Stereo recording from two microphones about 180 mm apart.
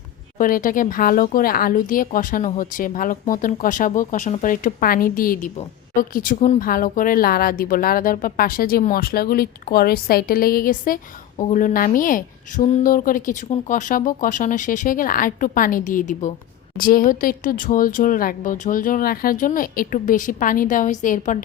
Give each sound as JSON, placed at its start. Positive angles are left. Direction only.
{"t": 0.3, "sound": "speech", "side_deg": 50}